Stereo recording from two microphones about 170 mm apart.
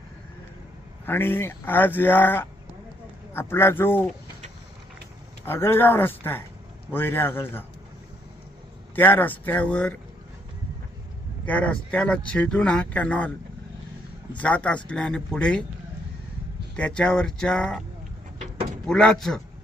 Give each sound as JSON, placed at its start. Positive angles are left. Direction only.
{"t": 1.0, "sound": "speech", "side_deg": 10}
{"t": 5.5, "sound": "speech", "side_deg": 15}
{"t": 9.0, "sound": "speech", "side_deg": 10}
{"t": 11.4, "sound": "speech", "side_deg": 10}
{"t": 14.3, "sound": "speech", "side_deg": 5}
{"t": 16.7, "sound": "speech", "side_deg": 5}
{"t": 18.9, "sound": "speech", "side_deg": 5}